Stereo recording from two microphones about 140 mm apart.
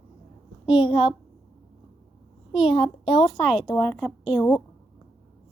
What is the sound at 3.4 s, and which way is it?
Speech, 5° right (ahead or behind).